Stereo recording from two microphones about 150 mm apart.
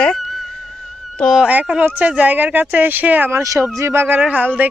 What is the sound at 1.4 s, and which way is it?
Speech, 10° right (ahead or behind).